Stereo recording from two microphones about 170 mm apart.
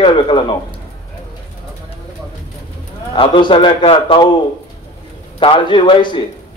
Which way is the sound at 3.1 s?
30° left (ahead or behind).